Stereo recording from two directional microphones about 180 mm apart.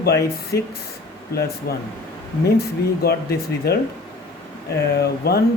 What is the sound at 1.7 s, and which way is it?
Speech, 60° left (ahead or behind).